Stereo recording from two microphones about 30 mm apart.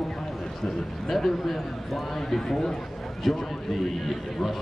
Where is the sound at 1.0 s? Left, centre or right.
Centre.